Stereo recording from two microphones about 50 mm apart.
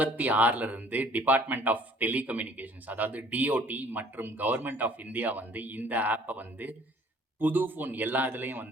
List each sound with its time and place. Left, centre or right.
0.0 s speech: right